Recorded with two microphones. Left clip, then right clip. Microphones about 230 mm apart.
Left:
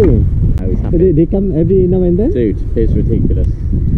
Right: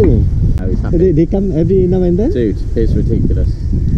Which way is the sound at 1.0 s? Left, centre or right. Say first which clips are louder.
Left 1 dB; right.